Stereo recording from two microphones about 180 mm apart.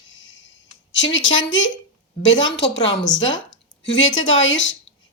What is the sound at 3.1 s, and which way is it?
Speech, 90° left.